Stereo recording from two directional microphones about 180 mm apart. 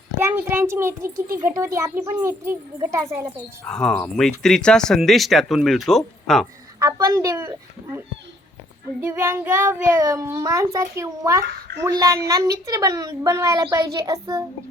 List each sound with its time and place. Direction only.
0.2 s a child's voice: 10° right (ahead or behind)
3.7 s speech: 5° left (ahead or behind)
6.7 s a child's voice: 20° right (ahead or behind)